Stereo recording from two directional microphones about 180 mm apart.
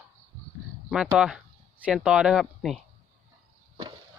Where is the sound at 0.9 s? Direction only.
5° right (ahead or behind).